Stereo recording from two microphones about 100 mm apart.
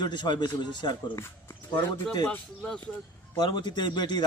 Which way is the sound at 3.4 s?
50° left (ahead or behind).